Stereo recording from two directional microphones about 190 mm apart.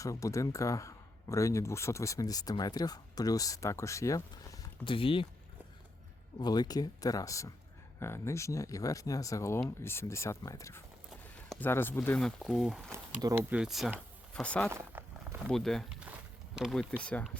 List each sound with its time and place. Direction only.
0.0 s speech: 15° left (ahead or behind)
6.4 s speech: 20° left (ahead or behind); by 13.0 s centre (ahead or behind)
13.2 s speech: 10° right (ahead or behind); by 14.7 s 5° left (ahead or behind)
14.7 s walk: 15° right (ahead or behind)
15.4 s speech: centre (ahead or behind)